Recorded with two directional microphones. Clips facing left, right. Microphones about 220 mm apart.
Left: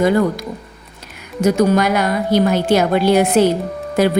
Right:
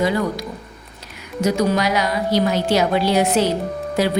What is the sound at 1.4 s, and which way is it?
A woman's voice, 50° left (ahead or behind).